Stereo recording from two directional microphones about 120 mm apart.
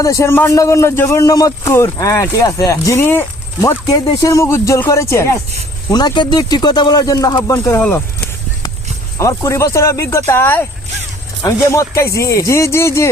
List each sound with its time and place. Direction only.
0.0 s a man's voice: 25° left (ahead or behind)
5.9 s speech: 35° left (ahead or behind)
7.5 s a man's voice: 20° left (ahead or behind)
9.1 s a man's voice: 25° left (ahead or behind)